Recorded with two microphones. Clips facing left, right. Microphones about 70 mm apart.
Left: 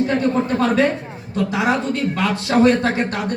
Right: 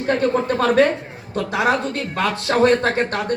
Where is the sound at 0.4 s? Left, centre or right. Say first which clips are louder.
Right 1 dB; right.